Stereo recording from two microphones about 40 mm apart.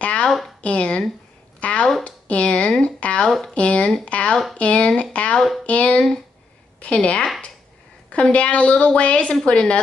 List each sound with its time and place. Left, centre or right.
0.0 s a sound: left
0.6 s a woman's voice: left
3.3 s speech: centre
3.5 s a woman's voice: left